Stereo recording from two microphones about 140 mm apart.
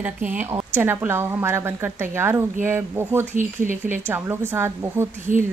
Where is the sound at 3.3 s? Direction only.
65° right (ahead or behind).